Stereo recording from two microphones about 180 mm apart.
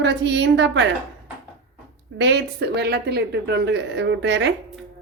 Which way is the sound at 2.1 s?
80° right.